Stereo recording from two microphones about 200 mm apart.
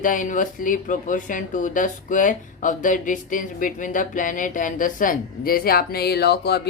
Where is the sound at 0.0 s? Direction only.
40° left (ahead or behind).